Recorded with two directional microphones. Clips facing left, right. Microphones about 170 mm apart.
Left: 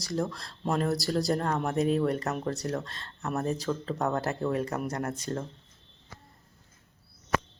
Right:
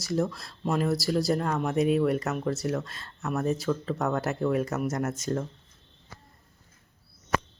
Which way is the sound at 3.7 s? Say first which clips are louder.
Right 3 dB; 10° left (ahead or behind).